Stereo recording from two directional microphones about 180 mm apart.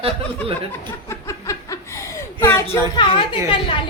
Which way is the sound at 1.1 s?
15° left (ahead or behind).